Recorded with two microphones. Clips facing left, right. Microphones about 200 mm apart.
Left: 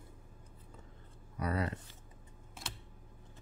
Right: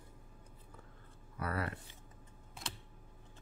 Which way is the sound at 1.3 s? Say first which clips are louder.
Left 3 dB; 20° left (ahead or behind).